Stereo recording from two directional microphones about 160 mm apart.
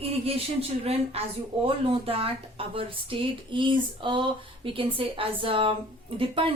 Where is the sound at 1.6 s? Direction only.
35° right (ahead or behind).